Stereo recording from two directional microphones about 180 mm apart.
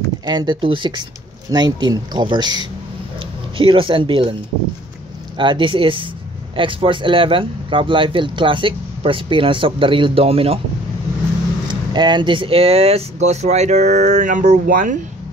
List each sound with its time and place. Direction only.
0.2 s speech: 20° right (ahead or behind)
5.4 s speech: 25° right (ahead or behind)
11.6 s speech: 25° right (ahead or behind); by 15.0 s 45° right (ahead or behind)